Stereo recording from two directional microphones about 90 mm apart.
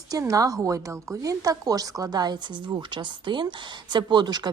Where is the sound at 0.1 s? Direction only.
40° right (ahead or behind).